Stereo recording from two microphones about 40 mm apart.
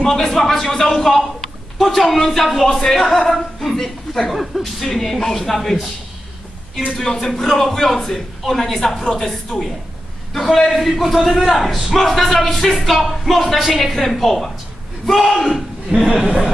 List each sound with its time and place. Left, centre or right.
0.0 s a man's voice: centre
7.0 s a man's voice: centre
9.0 s speech: centre
9.3 s a man's voice: centre
15.9 s speech: centre